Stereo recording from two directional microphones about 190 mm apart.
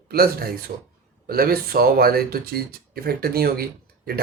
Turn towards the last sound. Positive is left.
turn(degrees=-55)  # may be behind; listen again after turning